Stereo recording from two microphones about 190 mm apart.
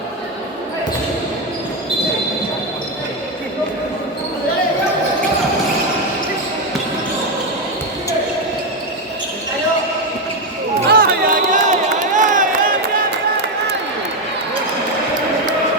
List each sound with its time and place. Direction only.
10.8 s crowd: 50° right (ahead or behind)